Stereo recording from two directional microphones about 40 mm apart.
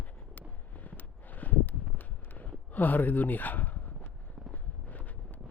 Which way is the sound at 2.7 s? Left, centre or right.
Left.